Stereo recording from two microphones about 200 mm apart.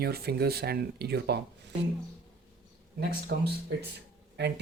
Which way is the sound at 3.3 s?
50° right (ahead or behind).